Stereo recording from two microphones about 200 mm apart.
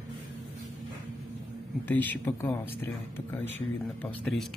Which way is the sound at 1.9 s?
10° left (ahead or behind).